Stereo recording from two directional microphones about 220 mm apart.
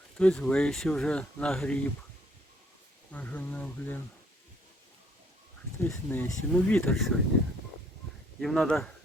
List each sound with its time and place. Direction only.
0.2 s speech: 5° left (ahead or behind)
3.1 s speech: 5° left (ahead or behind)
6.1 s speech: 10° left (ahead or behind)
8.4 s speech: centre (ahead or behind)